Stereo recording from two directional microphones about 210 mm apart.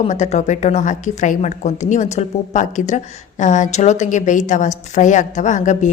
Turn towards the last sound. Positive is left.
turn(degrees=35)  # may be behind; listen again after turning